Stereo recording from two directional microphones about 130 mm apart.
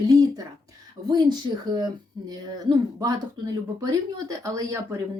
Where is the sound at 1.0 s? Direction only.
85° right.